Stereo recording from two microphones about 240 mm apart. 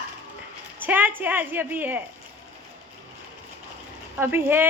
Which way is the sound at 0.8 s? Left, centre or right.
Centre.